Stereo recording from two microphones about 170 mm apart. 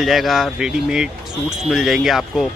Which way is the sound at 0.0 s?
Centre (ahead or behind).